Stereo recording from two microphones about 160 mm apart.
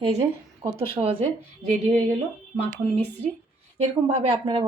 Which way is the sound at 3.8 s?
35° right (ahead or behind).